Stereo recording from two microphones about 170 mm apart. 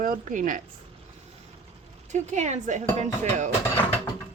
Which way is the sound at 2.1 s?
45° right (ahead or behind).